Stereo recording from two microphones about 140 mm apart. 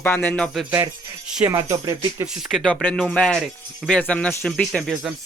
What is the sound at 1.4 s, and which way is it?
Speech, 25° right (ahead or behind).